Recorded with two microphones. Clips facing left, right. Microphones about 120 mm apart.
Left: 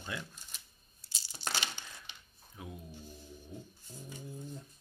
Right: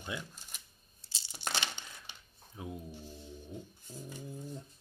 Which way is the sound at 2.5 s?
25° right (ahead or behind).